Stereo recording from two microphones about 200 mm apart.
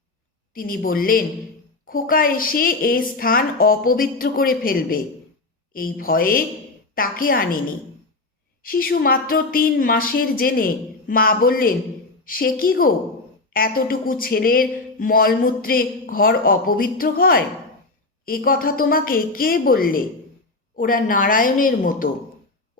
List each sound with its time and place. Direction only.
0.5 s speech: 45° left (ahead or behind)
8.6 s speech: 45° left (ahead or behind)